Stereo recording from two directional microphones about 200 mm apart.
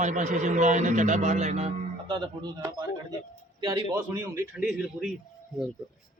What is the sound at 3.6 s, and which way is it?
A man's voice, 15° right (ahead or behind).